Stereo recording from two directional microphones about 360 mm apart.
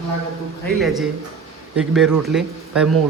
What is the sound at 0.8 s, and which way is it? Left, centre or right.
A man's voice, centre.